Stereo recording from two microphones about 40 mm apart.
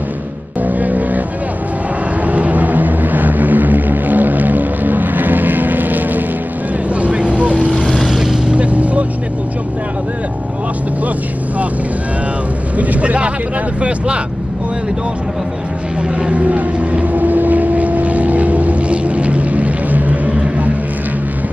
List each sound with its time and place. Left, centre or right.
0.6 s music: right
2.2 s vehicle: right
7.0 s vehicle: right
7.8 s vehicle: centre
8.1 s vehicle: centre
8.5 s vehicle: right
12.7 s vehicle: right
16.0 s vehicle: right